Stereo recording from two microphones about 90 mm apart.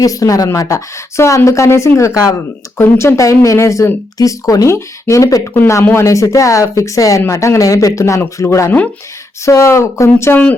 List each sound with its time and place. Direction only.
0.0 s speech: 40° left (ahead or behind)
6.1 s speech: 40° left (ahead or behind)